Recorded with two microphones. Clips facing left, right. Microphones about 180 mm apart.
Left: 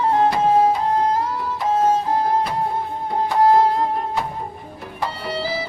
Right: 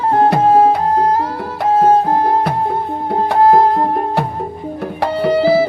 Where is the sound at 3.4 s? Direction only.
55° right (ahead or behind).